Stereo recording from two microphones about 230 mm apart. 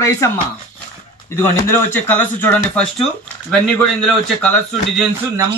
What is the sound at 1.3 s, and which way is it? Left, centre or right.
Speech, centre.